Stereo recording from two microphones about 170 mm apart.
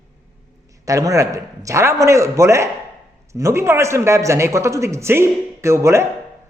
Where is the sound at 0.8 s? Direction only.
20° right (ahead or behind).